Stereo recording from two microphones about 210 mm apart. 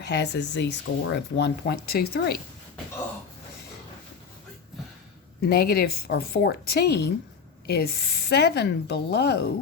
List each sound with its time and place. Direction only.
0.0 s speech: 55° left (ahead or behind)
5.4 s speech: 50° left (ahead or behind)